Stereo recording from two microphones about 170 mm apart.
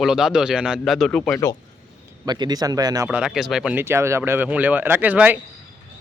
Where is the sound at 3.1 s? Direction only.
5° right (ahead or behind).